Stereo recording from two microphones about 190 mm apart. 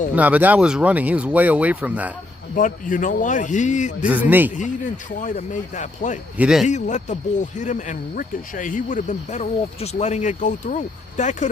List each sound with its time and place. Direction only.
0.2 s speech: 10° right (ahead or behind)
2.6 s speech: 45° left (ahead or behind)
4.0 s speech: 10° right (ahead or behind)
5.2 s speech: 40° left (ahead or behind)
6.3 s speech: 5° right (ahead or behind)
6.7 s speech: 40° left (ahead or behind)